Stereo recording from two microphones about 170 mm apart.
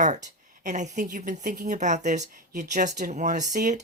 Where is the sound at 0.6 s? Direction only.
45° right (ahead or behind).